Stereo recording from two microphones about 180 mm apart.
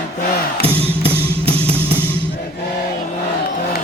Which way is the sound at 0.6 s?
30° right (ahead or behind).